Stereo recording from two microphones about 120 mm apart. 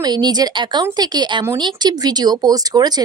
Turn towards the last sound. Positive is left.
turn(degrees=-35)  # may be behind; listen again after turning